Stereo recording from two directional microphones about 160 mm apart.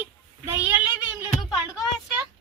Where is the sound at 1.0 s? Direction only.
10° right (ahead or behind).